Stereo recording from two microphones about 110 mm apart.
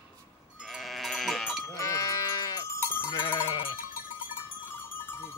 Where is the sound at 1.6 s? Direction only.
25° left (ahead or behind).